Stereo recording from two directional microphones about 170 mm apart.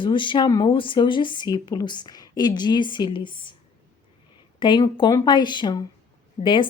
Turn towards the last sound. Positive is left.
turn(degrees=30)  # may be behind; listen again after turning